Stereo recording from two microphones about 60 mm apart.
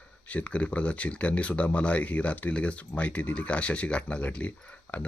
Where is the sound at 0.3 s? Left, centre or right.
Left.